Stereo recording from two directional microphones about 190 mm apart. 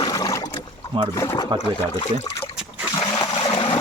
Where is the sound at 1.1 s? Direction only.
15° left (ahead or behind).